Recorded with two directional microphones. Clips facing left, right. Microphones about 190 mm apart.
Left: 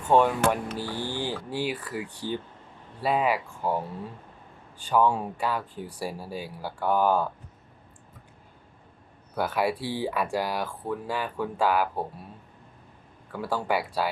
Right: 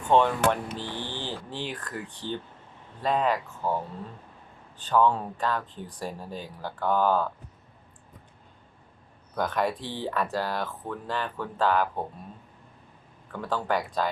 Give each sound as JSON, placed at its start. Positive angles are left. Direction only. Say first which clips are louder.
{"t": 0.0, "sound": "speech", "louder": "left 1 dB", "side_deg": 10}
{"t": 9.3, "sound": "speech", "louder": "left 1 dB", "side_deg": 10}
{"t": 13.3, "sound": "speech", "louder": "left 1 dB", "side_deg": 10}